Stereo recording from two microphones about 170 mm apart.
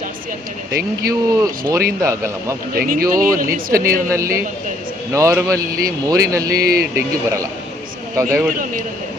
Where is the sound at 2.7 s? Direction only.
60° right (ahead or behind).